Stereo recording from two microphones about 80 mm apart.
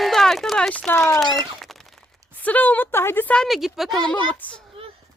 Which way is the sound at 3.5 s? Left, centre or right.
Centre.